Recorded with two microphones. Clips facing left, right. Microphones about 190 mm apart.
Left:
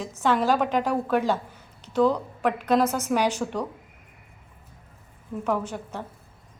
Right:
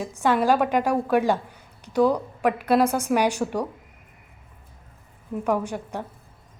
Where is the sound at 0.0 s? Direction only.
10° right (ahead or behind).